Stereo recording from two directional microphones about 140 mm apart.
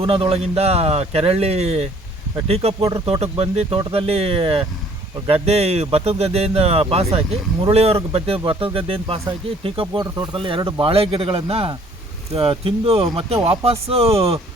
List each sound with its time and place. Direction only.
0.0 s speech: 45° right (ahead or behind)